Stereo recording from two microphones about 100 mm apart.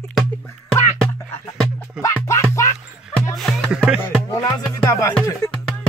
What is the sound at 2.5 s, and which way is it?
Music, 30° left (ahead or behind).